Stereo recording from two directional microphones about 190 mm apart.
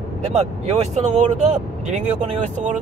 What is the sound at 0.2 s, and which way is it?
Speech, 35° right (ahead or behind).